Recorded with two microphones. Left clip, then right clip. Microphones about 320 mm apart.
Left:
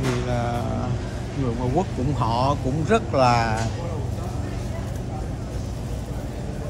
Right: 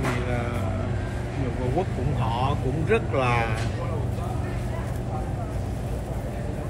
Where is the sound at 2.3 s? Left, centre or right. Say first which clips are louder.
Left 5 dB; left.